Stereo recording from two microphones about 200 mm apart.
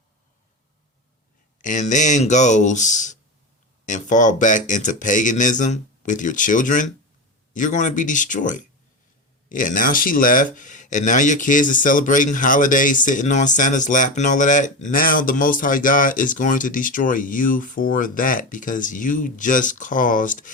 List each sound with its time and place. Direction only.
1.6 s speech: 40° left (ahead or behind)